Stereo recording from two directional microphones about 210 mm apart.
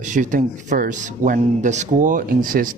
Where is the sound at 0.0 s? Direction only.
35° right (ahead or behind).